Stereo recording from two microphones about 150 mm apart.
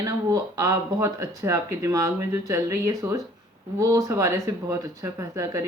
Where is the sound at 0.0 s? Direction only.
25° right (ahead or behind).